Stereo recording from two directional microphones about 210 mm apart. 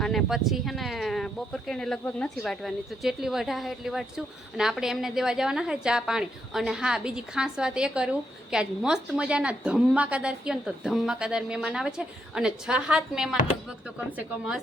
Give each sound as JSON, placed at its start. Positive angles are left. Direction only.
{"t": 0.0, "sound": "a woman's voice", "side_deg": 0}